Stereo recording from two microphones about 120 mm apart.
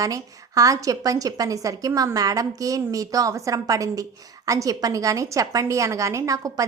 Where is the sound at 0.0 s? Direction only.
30° right (ahead or behind).